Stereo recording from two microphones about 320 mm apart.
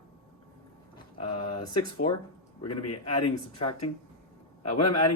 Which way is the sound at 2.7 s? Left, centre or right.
Left.